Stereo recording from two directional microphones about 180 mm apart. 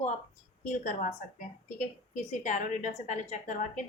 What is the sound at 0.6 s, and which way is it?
A woman's voice, 40° left (ahead or behind).